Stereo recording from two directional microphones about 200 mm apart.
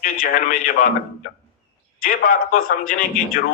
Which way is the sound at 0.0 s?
45° left (ahead or behind).